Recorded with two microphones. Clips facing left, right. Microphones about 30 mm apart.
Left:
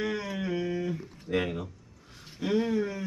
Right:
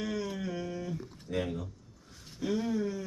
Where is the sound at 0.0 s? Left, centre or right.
Left.